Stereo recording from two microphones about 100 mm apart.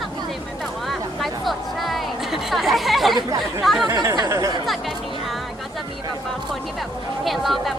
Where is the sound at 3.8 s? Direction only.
40° right (ahead or behind).